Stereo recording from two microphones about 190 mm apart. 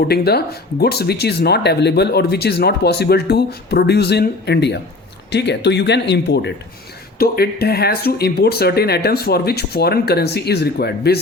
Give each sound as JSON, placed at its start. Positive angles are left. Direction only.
{"t": 0.1, "sound": "speech", "side_deg": 55}
{"t": 7.2, "sound": "speech", "side_deg": 55}